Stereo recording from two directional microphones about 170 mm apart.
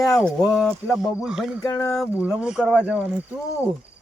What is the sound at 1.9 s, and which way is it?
Speech, 5° right (ahead or behind).